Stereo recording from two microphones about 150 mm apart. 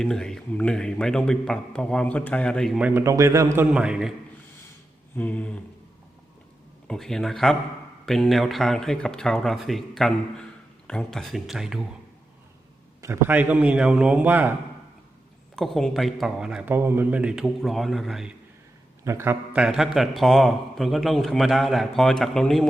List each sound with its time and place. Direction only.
0.0 s speech: 5° left (ahead or behind)
2.7 s a man's voice: 10° right (ahead or behind)
3.7 s speech: 5° right (ahead or behind)
5.1 s a sound: 10° left (ahead or behind)
6.8 s speech: 5° left (ahead or behind)
13.0 s a man's voice: 15° right (ahead or behind)
15.5 s speech: centre (ahead or behind)
19.0 s speech: 15° right (ahead or behind); by 22.6 s centre (ahead or behind)